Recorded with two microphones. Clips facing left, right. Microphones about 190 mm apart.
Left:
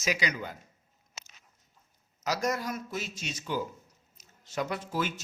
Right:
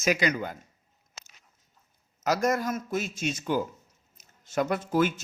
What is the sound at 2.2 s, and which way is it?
A man's voice, 50° right (ahead or behind).